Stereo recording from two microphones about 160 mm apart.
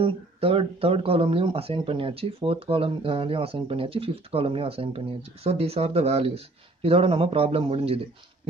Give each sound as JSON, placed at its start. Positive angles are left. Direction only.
{"t": 0.0, "sound": "speech", "side_deg": -35}